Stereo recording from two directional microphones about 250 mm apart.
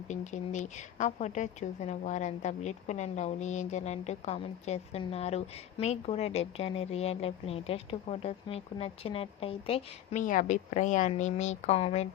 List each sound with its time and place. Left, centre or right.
0.1 s a woman's voice: left